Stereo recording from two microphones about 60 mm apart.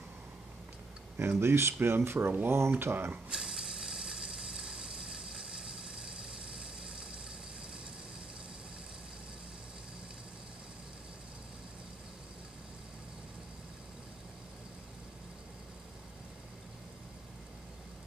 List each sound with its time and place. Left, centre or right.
1.4 s speech: right
3.3 s ratchet: centre